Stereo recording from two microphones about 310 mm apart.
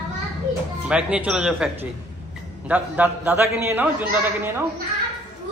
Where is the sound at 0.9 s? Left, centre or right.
Centre.